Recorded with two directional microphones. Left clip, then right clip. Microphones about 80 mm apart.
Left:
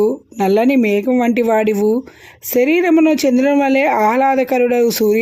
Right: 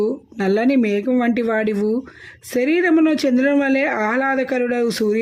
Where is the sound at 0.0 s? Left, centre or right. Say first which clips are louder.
Left 5 dB; left.